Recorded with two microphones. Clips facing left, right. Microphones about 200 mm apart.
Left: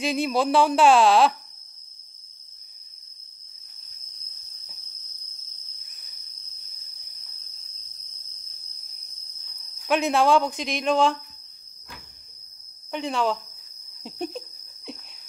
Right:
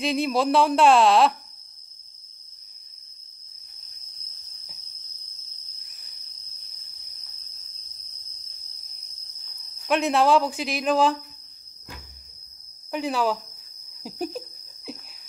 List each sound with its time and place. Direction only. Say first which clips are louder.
0.0 s speech: even; centre (ahead or behind)
5.9 s cricket: even; centre (ahead or behind)
9.6 s speech: even; centre (ahead or behind)
12.9 s speech: right 1 dB; 5° right (ahead or behind)
14.9 s a sound: right 1 dB; 5° right (ahead or behind)